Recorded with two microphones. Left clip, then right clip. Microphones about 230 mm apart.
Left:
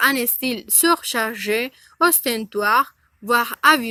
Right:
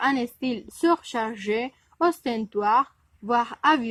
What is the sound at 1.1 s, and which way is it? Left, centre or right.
Speech, centre.